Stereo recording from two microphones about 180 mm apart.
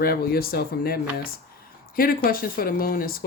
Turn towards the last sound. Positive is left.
turn(degrees=55)  # may be behind; listen again after turning